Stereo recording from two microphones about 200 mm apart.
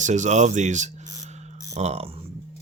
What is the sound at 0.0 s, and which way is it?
Speech, 35° right (ahead or behind).